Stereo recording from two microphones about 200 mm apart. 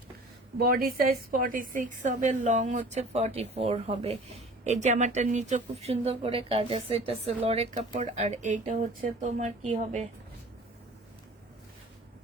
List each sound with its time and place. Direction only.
0.6 s a woman's voice: 50° right (ahead or behind)